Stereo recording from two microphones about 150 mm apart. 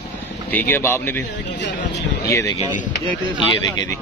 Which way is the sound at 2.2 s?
20° left (ahead or behind).